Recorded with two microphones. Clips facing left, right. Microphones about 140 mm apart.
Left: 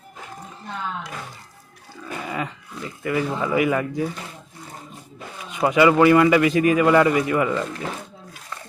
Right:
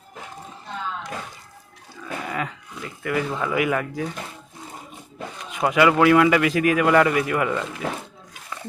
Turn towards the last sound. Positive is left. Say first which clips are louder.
# left 2 dB
turn(degrees=0)  # may be behind; listen again after turning